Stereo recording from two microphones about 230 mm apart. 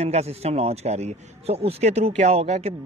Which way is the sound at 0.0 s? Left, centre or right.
Right.